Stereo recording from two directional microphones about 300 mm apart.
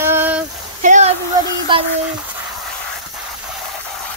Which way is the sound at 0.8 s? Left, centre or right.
Right.